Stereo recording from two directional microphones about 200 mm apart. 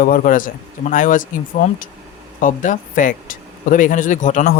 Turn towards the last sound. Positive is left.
turn(degrees=45)  # may be behind; listen again after turning